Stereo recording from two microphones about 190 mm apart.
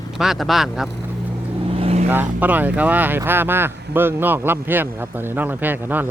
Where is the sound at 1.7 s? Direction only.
30° right (ahead or behind).